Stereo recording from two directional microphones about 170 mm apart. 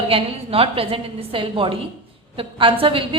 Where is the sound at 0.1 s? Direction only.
35° right (ahead or behind).